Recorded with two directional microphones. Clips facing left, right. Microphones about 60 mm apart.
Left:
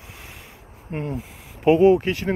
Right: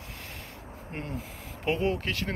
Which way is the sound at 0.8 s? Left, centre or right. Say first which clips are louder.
Left 8 dB; centre.